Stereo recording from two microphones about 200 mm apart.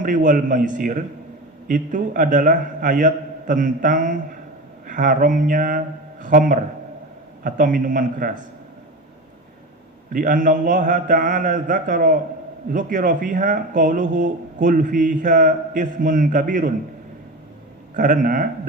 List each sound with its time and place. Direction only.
0.0 s a man's voice: 40° right (ahead or behind)
10.1 s speech: 40° right (ahead or behind)
17.9 s a man's voice: 40° right (ahead or behind)